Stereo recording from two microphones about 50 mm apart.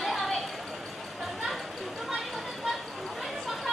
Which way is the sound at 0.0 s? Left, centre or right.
Centre.